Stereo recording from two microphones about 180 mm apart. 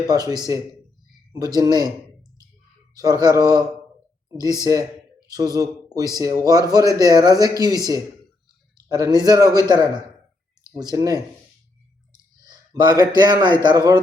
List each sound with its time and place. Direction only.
0.1 s a man's voice: 20° right (ahead or behind)
2.9 s a man's voice: 20° right (ahead or behind)
9.0 s a man's voice: 20° right (ahead or behind)
12.4 s a man's voice: 25° right (ahead or behind)